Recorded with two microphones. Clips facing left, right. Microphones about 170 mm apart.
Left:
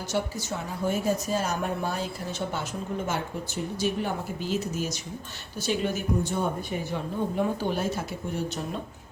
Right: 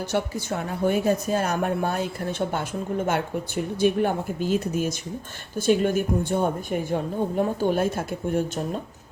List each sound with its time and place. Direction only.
0.1 s speech: 60° right (ahead or behind)
3.1 s speech: 60° right (ahead or behind)